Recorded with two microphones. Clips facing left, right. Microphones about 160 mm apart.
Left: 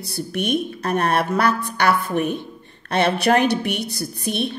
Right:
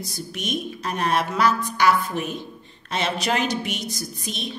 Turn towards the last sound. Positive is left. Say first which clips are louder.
# left 8 dB
turn(degrees=60)  # may be behind; listen again after turning